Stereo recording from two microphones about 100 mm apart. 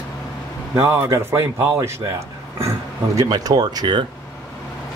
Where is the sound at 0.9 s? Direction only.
30° right (ahead or behind).